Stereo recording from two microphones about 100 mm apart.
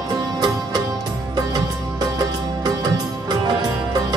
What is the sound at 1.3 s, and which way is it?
Music, 45° right (ahead or behind).